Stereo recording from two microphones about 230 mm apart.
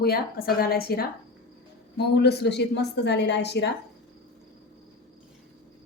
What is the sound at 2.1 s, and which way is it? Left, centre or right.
A woman's voice, left.